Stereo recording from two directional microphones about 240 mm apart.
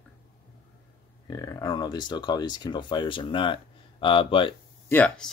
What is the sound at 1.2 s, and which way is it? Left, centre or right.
Speech, centre.